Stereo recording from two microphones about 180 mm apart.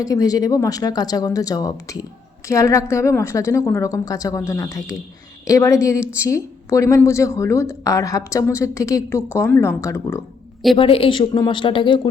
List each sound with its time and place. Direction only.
0.0 s a woman's voice: 20° left (ahead or behind)
10.8 s speech: 30° left (ahead or behind)